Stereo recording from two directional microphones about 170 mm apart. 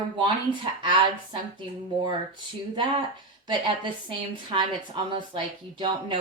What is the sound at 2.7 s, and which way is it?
A woman's voice, 25° right (ahead or behind).